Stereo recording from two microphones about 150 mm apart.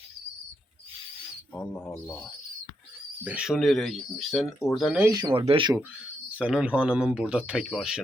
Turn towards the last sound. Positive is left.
turn(degrees=-5)  # may be behind; listen again after turning